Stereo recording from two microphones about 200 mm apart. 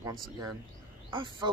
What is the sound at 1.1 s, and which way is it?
Speech, 25° right (ahead or behind).